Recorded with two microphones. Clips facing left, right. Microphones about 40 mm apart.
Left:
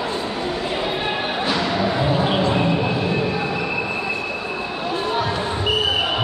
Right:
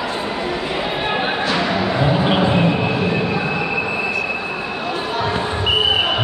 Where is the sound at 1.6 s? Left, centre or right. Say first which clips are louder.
Right 2 dB; right.